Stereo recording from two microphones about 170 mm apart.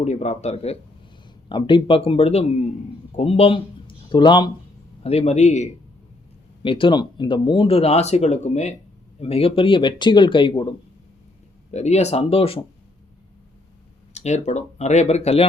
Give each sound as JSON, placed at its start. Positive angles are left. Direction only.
{"t": 0.0, "sound": "speech", "side_deg": 40}
{"t": 5.0, "sound": "speech", "side_deg": 40}
{"t": 6.6, "sound": "speech", "side_deg": 30}
{"t": 11.7, "sound": "speech", "side_deg": 40}
{"t": 14.1, "sound": "speech", "side_deg": 40}